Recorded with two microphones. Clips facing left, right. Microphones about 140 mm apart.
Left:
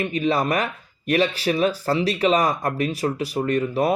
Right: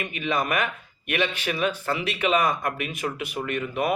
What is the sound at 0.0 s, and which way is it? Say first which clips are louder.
Speech: left 5 dB; 35° left (ahead or behind).